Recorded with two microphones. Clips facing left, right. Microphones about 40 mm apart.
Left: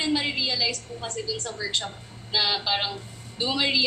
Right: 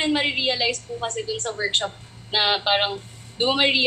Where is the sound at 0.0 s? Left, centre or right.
Right.